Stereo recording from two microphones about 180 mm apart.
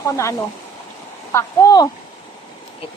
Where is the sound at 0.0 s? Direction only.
15° left (ahead or behind).